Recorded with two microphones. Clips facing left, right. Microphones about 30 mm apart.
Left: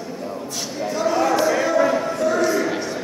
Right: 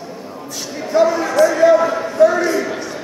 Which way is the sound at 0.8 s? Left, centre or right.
Centre.